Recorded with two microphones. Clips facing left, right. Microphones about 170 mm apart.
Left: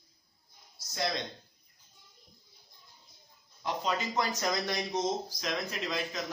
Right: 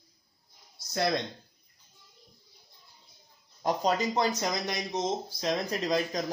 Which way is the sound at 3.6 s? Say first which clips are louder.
Right 6 dB; 40° right (ahead or behind).